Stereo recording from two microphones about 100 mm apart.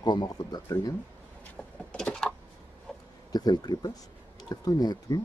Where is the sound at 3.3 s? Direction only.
40° left (ahead or behind).